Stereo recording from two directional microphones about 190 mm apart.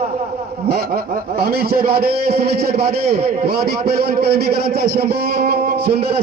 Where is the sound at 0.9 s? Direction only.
55° right (ahead or behind).